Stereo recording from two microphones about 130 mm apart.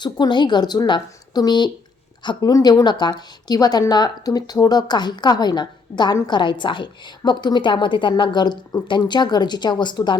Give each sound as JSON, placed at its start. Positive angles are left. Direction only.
{"t": 0.0, "sound": "a woman's voice", "side_deg": 35}